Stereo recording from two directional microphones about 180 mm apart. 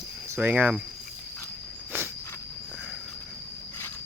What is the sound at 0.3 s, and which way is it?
Speech, 10° right (ahead or behind).